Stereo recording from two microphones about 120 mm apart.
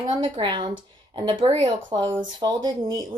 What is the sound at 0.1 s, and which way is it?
A woman's voice, 40° right (ahead or behind).